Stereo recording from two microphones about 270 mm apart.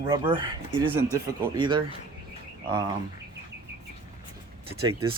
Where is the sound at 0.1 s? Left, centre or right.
Centre.